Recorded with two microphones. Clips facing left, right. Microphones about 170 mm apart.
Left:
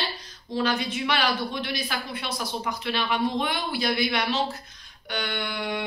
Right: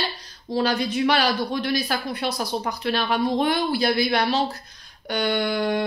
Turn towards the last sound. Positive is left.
turn(degrees=-40)  # may be behind; listen again after turning